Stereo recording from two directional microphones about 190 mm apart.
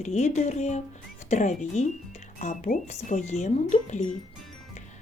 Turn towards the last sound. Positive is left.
turn(degrees=40)  # may be behind; listen again after turning